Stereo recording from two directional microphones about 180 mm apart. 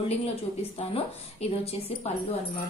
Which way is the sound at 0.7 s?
35° left (ahead or behind).